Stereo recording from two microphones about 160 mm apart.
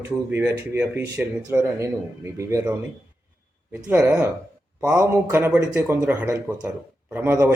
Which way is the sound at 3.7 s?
10° right (ahead or behind).